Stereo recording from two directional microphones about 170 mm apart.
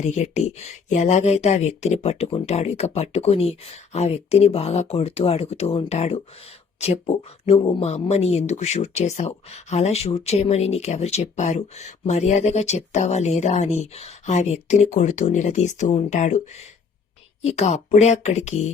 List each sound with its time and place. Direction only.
0.0 s speech: 45° left (ahead or behind)
17.4 s speech: 40° left (ahead or behind)